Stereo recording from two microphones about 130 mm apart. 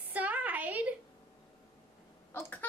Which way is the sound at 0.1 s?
10° right (ahead or behind).